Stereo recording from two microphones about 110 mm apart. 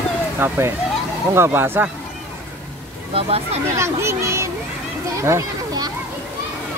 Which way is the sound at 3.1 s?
60° right (ahead or behind).